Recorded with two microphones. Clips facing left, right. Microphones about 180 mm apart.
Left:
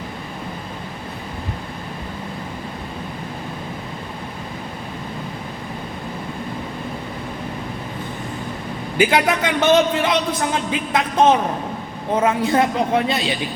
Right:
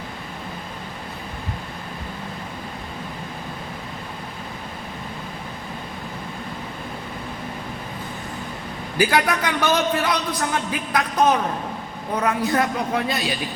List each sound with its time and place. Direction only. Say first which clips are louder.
9.0 s a man's voice: left 3 dB; 20° left (ahead or behind)